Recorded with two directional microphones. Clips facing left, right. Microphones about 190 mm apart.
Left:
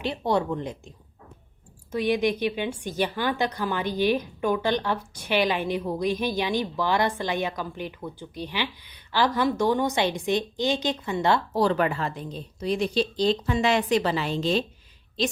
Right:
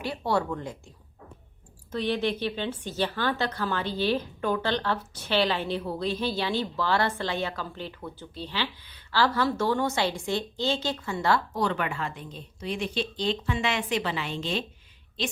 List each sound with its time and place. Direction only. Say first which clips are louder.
0.0 s a woman's voice: left 3 dB; 20° left (ahead or behind)
11.5 s speech: left 5 dB; 35° left (ahead or behind)